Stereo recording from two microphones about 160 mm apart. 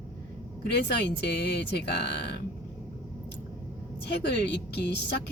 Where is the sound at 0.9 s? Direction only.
90° left.